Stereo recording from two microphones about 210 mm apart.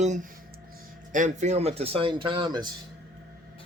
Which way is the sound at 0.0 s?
35° right (ahead or behind).